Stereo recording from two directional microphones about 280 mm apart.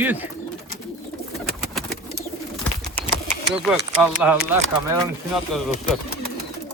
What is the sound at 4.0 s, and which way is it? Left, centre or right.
Speech, centre.